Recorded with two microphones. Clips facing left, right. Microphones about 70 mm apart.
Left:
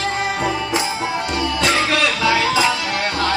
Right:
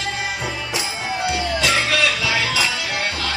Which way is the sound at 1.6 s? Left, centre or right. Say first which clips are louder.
Left 2 dB; left.